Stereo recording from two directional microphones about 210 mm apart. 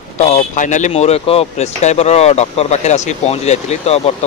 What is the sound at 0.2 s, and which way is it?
Speech, 35° left (ahead or behind).